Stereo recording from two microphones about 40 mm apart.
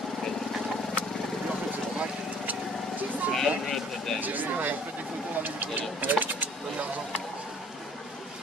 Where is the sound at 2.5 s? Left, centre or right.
Right.